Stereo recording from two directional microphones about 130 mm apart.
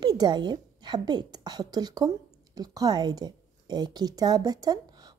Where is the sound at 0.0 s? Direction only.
30° right (ahead or behind).